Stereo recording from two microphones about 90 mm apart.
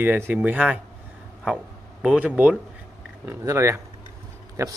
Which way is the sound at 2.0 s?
15° right (ahead or behind).